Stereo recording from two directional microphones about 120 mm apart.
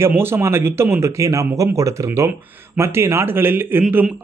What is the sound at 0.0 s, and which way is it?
A man's voice, 20° right (ahead or behind).